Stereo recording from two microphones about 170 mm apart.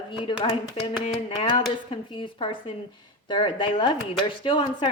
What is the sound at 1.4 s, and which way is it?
A woman's voice, 30° left (ahead or behind).